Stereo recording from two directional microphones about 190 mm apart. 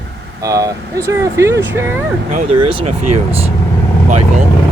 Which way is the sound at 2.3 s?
40° right (ahead or behind).